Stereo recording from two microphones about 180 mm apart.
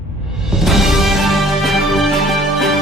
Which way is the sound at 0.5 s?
Centre (ahead or behind).